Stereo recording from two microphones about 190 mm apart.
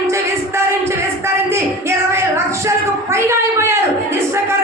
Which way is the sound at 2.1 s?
15° right (ahead or behind).